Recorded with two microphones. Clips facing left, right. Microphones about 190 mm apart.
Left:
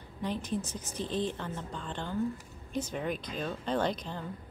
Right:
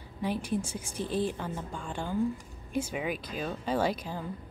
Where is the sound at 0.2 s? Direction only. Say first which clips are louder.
Right 3 dB; 10° right (ahead or behind).